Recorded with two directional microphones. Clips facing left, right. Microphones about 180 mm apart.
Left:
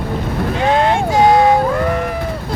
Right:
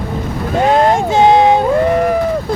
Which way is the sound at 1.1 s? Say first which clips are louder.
Right 1 dB; 25° right (ahead or behind).